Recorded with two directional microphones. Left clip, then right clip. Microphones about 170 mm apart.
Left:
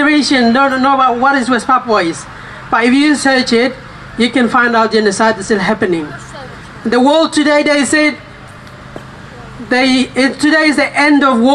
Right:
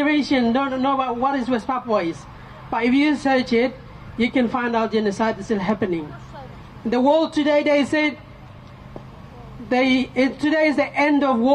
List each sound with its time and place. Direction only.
0.0 s a man's voice: 45° right (ahead or behind)
6.9 s a man's voice: 45° right (ahead or behind)
9.7 s a man's voice: 45° right (ahead or behind)